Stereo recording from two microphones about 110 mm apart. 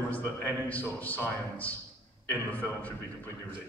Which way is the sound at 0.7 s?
15° left (ahead or behind).